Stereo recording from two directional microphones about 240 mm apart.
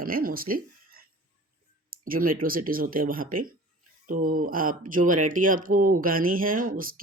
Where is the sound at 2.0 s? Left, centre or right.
Right.